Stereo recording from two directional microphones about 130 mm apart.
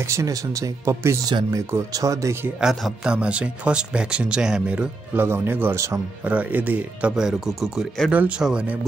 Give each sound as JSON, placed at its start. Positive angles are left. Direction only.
{"t": 0.0, "sound": "speech", "side_deg": -25}
{"t": 2.6, "sound": "speech", "side_deg": 0}